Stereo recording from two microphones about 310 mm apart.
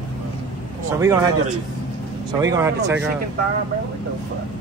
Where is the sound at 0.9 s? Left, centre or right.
Centre.